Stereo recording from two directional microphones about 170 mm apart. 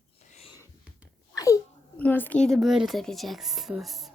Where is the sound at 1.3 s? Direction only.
20° left (ahead or behind); by 4.1 s centre (ahead or behind).